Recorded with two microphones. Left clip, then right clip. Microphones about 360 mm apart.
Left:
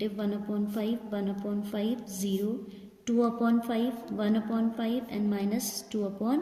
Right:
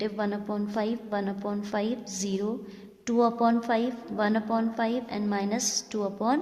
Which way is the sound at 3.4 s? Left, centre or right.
Centre.